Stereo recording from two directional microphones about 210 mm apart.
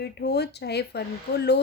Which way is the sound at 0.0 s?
50° left (ahead or behind).